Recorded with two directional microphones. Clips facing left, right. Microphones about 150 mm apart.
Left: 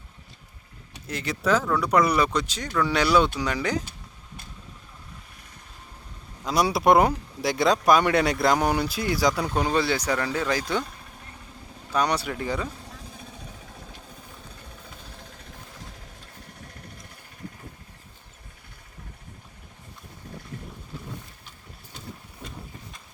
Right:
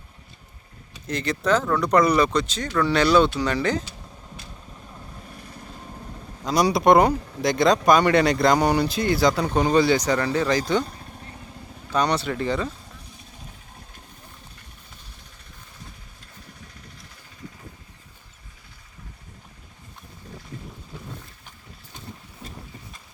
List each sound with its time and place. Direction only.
1.0 s speech: 10° left (ahead or behind)
6.4 s speech: 5° left (ahead or behind)
11.9 s speech: 10° left (ahead or behind)
15.1 s jackhammer: 90° left